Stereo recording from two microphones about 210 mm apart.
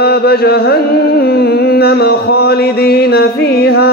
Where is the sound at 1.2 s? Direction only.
50° left (ahead or behind).